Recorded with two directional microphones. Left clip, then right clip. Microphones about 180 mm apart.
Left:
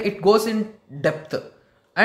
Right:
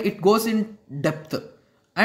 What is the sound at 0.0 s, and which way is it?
Speech, 25° right (ahead or behind).